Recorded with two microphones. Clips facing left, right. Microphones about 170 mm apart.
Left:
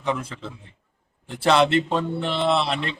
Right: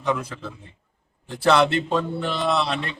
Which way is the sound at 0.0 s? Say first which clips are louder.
Right 1 dB; 30° left (ahead or behind).